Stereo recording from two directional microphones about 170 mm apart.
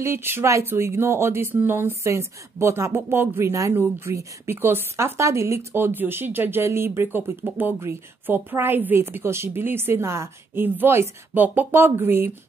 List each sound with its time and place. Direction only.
0.0 s speech: 15° right (ahead or behind)